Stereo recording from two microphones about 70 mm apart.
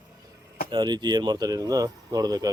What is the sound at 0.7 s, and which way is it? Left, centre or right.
Speech, right.